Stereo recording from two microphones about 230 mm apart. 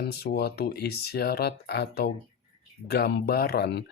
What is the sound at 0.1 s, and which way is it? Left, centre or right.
Speech, left.